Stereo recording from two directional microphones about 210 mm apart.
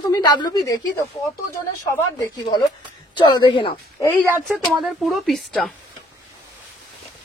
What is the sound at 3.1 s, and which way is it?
Speech, 20° left (ahead or behind).